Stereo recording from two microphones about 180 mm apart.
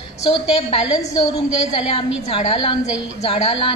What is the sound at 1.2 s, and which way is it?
A woman's voice, 35° left (ahead or behind).